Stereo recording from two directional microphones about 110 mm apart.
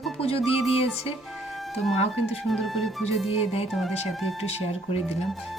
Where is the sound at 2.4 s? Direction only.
Centre (ahead or behind).